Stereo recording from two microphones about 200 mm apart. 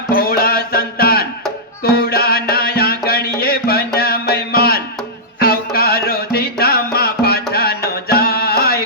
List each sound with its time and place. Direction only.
0.1 s music: 50° left (ahead or behind)